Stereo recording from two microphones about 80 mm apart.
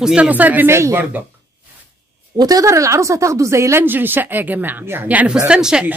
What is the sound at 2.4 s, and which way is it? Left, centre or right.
Speech, right.